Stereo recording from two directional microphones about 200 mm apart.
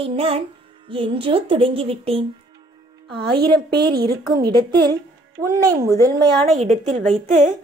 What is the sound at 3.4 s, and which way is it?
Speech, 50° right (ahead or behind).